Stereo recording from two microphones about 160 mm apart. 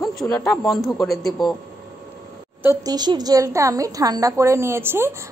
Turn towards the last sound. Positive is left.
turn(degrees=-15)  # may be behind; listen again after turning